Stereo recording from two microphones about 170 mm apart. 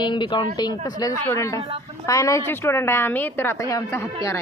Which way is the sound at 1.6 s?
30° right (ahead or behind).